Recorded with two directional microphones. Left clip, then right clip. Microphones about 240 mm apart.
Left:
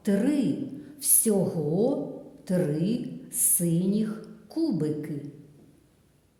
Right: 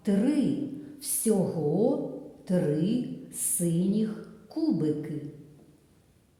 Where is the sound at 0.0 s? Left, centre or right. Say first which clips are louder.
Left 1 dB; left.